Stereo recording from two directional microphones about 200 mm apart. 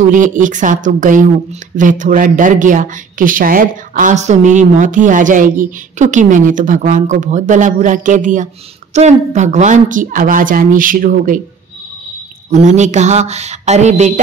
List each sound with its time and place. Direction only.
0.0 s speech: 40° right (ahead or behind)
12.4 s speech: 35° right (ahead or behind)